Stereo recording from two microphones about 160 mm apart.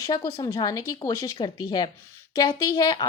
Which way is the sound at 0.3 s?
25° left (ahead or behind).